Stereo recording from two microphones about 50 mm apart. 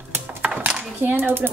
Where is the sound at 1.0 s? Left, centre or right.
Right.